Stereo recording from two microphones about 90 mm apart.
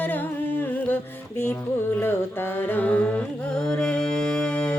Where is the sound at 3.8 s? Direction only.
10° left (ahead or behind).